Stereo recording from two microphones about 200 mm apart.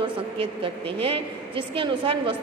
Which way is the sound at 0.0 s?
25° right (ahead or behind).